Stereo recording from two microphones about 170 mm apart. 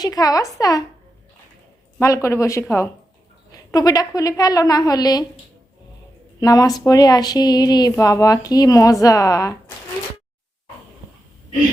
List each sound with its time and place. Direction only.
0.0 s speech: 20° left (ahead or behind)
2.0 s speech: 20° left (ahead or behind)
6.4 s speech: 20° left (ahead or behind)